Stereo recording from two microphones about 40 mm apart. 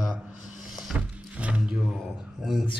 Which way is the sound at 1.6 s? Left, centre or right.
Centre.